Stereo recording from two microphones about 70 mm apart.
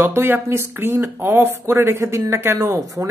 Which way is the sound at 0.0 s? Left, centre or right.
Right.